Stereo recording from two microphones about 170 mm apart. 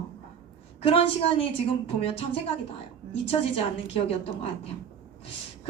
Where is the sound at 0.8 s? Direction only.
35° left (ahead or behind).